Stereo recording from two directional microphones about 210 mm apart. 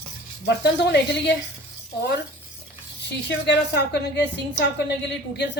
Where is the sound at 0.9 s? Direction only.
55° left (ahead or behind).